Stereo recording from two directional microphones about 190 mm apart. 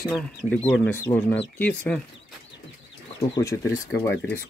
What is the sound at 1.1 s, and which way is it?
Speech, 25° left (ahead or behind).